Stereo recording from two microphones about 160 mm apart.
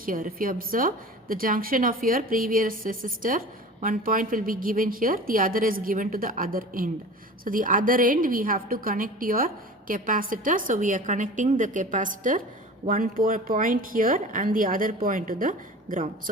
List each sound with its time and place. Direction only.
0.0 s a woman's voice: 60° right (ahead or behind)